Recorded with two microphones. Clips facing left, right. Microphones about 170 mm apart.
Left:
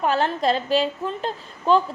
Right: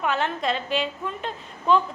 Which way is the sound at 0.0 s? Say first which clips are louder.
Left 4 dB; 35° left (ahead or behind).